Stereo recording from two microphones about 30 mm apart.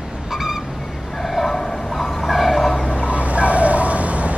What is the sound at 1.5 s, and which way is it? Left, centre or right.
Train, centre.